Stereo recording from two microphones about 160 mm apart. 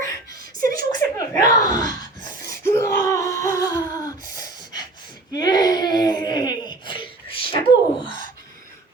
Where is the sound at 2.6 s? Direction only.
15° left (ahead or behind).